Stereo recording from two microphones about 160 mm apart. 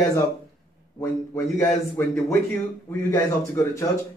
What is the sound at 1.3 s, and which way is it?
A man's voice, 15° left (ahead or behind).